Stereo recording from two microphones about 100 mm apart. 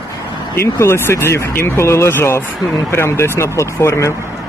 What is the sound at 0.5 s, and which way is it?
Speech, 25° left (ahead or behind).